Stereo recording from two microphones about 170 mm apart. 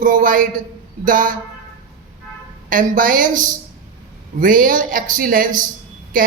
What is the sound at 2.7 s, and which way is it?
A man's voice, 55° right (ahead or behind).